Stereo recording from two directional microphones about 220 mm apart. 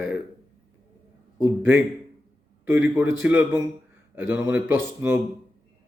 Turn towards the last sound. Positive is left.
turn(degrees=-10)  # may be behind; listen again after turning